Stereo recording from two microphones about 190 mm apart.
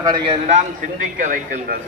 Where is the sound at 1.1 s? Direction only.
45° right (ahead or behind).